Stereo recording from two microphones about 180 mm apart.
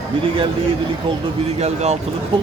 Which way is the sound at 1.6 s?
35° right (ahead or behind).